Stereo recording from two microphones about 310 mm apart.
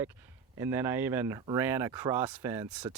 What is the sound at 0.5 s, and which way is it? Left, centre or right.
Speech, centre.